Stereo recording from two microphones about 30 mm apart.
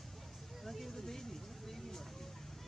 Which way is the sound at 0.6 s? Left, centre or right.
Centre.